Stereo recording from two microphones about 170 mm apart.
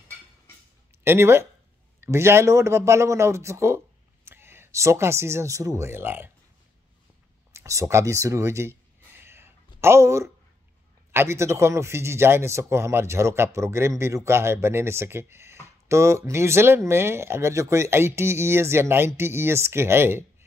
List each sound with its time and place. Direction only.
1.0 s a man's voice: 15° right (ahead or behind)
7.5 s a man's voice: 15° right (ahead or behind)
9.2 s a sound: 15° right (ahead or behind)
11.1 s a man's voice: 15° right (ahead or behind)